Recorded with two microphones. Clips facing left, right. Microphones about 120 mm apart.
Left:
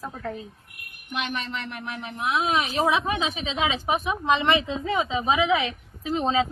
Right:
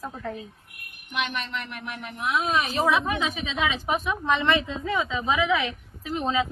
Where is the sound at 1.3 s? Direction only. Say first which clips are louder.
Left 1 dB; 35° left (ahead or behind).